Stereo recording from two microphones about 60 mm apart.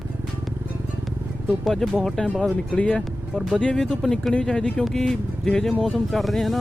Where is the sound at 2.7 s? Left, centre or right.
Centre.